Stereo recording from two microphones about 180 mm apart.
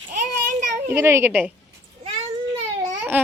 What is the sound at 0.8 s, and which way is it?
Speech, 15° right (ahead or behind).